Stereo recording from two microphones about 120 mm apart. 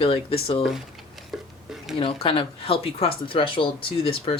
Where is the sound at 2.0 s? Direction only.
50° left (ahead or behind).